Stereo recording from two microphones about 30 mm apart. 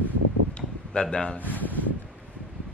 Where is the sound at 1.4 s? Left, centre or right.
Left.